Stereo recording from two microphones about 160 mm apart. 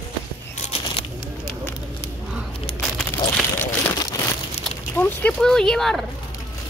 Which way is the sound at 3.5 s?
20° left (ahead or behind).